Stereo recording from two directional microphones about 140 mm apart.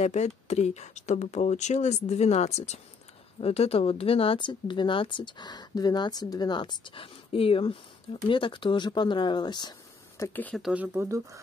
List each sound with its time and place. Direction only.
0.0 s speech: 55° left (ahead or behind); by 10.6 s 10° left (ahead or behind)
10.6 s speech: 10° right (ahead or behind)